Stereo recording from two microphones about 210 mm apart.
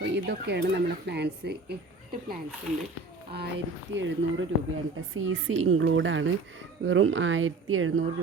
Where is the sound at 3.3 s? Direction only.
55° right (ahead or behind).